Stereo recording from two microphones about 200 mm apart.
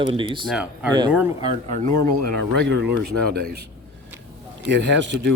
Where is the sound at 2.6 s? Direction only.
55° right (ahead or behind).